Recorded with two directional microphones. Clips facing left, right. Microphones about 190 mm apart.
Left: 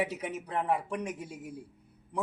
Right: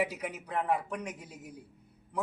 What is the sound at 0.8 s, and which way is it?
Speech, 30° left (ahead or behind).